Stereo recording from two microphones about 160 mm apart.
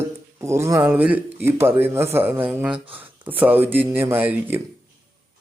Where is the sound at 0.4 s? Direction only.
15° right (ahead or behind).